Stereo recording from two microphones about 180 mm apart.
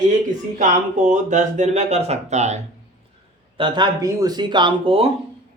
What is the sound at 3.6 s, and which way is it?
Speech, 25° right (ahead or behind).